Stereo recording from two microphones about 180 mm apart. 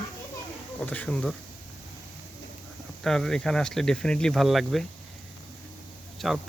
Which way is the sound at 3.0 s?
5° left (ahead or behind).